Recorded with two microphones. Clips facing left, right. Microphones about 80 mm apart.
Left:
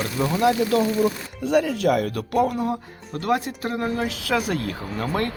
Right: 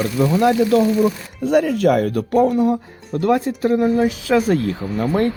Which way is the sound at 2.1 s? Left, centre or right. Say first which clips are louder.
Right 6 dB; right.